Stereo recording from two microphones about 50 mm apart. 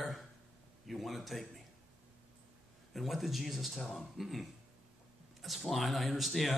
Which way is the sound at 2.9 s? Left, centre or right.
Centre.